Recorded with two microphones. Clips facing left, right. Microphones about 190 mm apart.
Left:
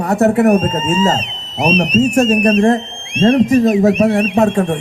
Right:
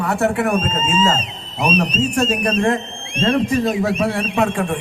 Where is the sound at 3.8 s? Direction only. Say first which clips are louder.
Left 7 dB; 40° left (ahead or behind).